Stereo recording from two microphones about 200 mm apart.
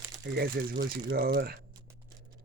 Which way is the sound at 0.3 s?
50° right (ahead or behind).